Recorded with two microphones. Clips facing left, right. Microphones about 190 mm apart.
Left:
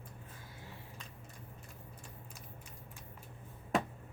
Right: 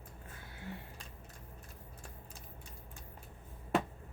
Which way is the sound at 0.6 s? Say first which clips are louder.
Right 9 dB; 65° right (ahead or behind).